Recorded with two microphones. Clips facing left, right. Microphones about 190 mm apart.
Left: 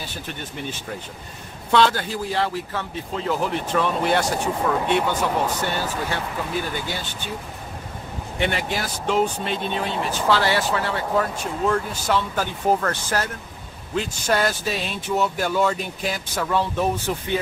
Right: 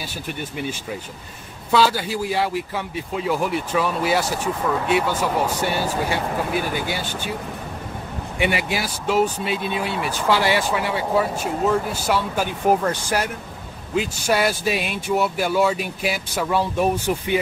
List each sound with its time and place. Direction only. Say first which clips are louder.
0.4 s speech: right 6 dB; 10° right (ahead or behind)
8.4 s speech: right 2 dB; 10° right (ahead or behind)